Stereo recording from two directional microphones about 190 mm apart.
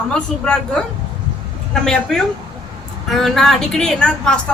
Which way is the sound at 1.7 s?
5° left (ahead or behind).